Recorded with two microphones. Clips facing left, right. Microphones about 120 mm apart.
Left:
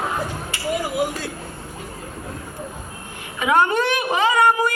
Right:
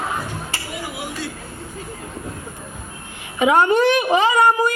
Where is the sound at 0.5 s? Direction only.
35° right (ahead or behind).